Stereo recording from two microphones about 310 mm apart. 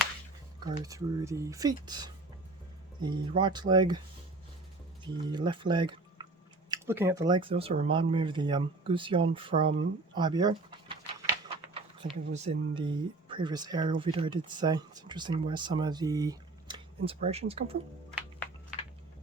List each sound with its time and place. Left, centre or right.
0.6 s speech: centre
5.1 s speech: centre